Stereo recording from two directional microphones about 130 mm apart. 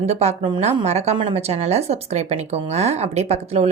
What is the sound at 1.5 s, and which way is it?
A woman's voice, 55° right (ahead or behind).